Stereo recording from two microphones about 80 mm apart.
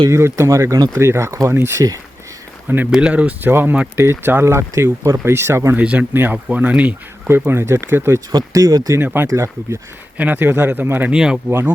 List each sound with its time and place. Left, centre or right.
0.1 s speech: right
2.6 s speech: right
2.9 s speech: centre; by 5.7 s right
5.7 s speech: centre
7.3 s speech: right
8.3 s speech: right
9.0 s speech: right
9.2 s speech: right
10.2 s speech: right
11.1 s speech: centre